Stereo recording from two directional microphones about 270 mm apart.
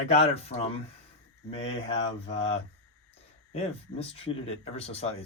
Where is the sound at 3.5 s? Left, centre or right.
Left.